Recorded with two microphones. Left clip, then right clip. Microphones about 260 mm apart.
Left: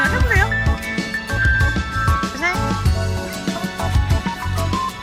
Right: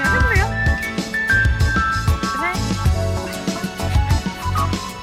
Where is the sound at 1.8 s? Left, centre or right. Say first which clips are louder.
Right 1 dB; centre.